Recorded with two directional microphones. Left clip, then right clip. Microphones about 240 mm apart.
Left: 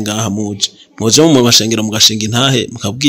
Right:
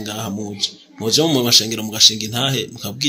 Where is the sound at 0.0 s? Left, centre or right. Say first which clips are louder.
Left 9 dB; left.